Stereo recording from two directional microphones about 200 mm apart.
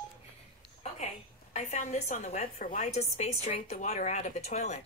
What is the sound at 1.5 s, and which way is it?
A woman's voice, 35° left (ahead or behind).